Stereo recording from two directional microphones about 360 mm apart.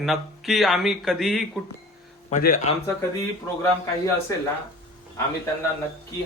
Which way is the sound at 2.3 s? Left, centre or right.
Left.